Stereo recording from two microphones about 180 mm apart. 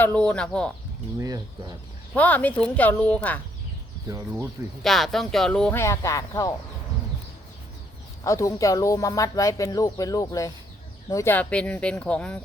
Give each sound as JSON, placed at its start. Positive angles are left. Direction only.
{"t": 0.0, "sound": "speech", "side_deg": 10}
{"t": 1.2, "sound": "speech", "side_deg": -20}
{"t": 2.1, "sound": "speech", "side_deg": 10}
{"t": 4.8, "sound": "speech", "side_deg": 0}
{"t": 5.8, "sound": "speech", "side_deg": 15}
{"t": 8.2, "sound": "speech", "side_deg": 15}